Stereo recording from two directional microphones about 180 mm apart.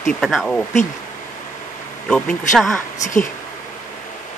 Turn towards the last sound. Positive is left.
turn(degrees=45)  # may be behind; listen again after turning